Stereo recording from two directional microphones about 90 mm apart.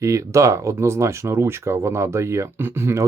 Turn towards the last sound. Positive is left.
turn(degrees=-30)  # may be behind; listen again after turning